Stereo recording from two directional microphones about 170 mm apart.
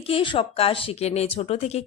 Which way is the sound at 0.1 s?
30° left (ahead or behind).